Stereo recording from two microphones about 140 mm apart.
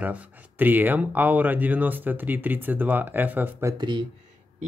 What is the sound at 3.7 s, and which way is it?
Speech, 35° right (ahead or behind).